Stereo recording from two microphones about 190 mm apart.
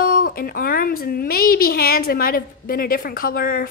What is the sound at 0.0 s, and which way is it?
Speech, 50° left (ahead or behind).